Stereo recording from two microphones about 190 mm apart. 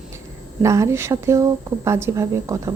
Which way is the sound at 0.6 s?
15° right (ahead or behind).